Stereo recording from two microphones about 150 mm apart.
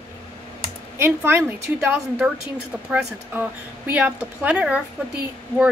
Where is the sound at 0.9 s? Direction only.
15° right (ahead or behind).